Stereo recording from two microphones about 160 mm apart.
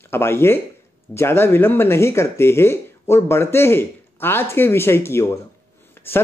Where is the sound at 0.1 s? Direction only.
15° left (ahead or behind).